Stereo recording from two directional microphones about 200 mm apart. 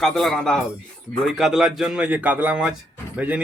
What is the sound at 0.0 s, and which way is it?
A man's voice, centre (ahead or behind).